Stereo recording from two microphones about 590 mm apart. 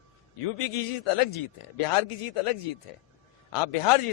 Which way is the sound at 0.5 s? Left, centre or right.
Left.